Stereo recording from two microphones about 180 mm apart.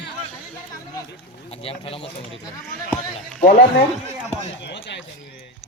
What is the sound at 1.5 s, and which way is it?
Speech, 35° left (ahead or behind).